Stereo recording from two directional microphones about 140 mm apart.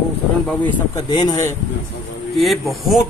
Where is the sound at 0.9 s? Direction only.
30° left (ahead or behind).